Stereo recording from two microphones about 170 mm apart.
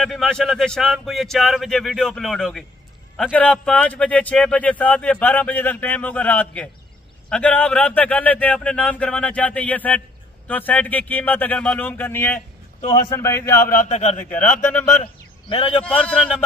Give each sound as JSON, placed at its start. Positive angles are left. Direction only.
{"t": 0.0, "sound": "a man's voice", "side_deg": 0}
{"t": 3.6, "sound": "speech", "side_deg": 10}
{"t": 13.7, "sound": "speech", "side_deg": 45}
{"t": 14.3, "sound": "speech", "side_deg": 10}
{"t": 15.4, "sound": "a man's voice", "side_deg": 30}
{"t": 15.8, "sound": "a man's voice", "side_deg": 5}